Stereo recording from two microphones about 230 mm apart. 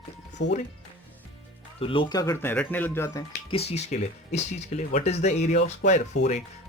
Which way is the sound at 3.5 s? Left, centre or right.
Left.